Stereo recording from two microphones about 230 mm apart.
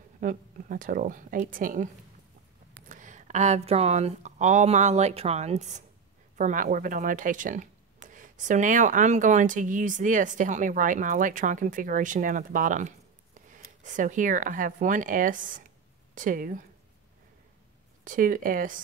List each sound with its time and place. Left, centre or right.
0.2 s speech: right
2.9 s speech: right
18.0 s speech: right